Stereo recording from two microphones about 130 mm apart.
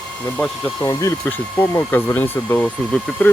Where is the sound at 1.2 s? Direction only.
15° left (ahead or behind).